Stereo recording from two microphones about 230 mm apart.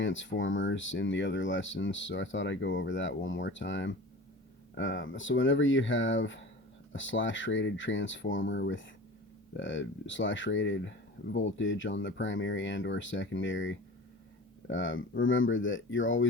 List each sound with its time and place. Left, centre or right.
0.0 s speech: left